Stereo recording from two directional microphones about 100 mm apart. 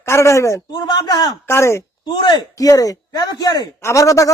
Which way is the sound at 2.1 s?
50° left (ahead or behind).